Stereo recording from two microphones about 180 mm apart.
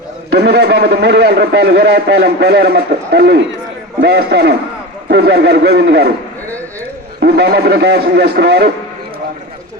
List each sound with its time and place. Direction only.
0.3 s a man's voice: 65° right (ahead or behind)
7.2 s a man's voice: 65° right (ahead or behind)